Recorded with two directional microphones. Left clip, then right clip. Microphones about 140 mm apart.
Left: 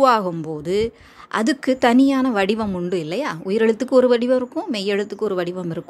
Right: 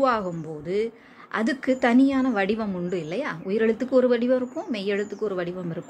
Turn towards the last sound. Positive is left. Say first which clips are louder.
# left 6 dB
turn(degrees=45)  # may be behind; listen again after turning